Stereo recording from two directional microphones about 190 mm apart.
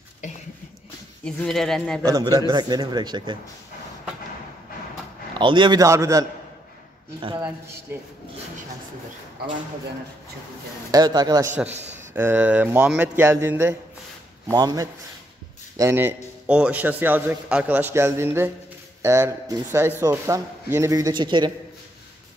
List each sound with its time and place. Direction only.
1.2 s speech: 5° left (ahead or behind)
2.0 s a man's voice: 20° right (ahead or behind)
5.3 s a man's voice: 25° right (ahead or behind)
7.3 s a man's voice: 10° right (ahead or behind)
10.9 s a man's voice: 20° right (ahead or behind)